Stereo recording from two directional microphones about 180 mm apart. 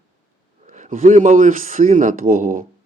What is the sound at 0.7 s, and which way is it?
A man's voice, 45° right (ahead or behind).